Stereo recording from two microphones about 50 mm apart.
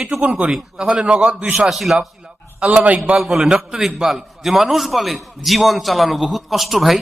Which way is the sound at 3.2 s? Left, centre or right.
Centre.